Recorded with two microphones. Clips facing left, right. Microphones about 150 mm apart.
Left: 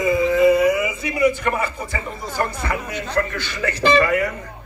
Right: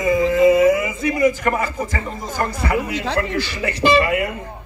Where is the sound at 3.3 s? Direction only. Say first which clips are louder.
Right 3 dB; 30° right (ahead or behind).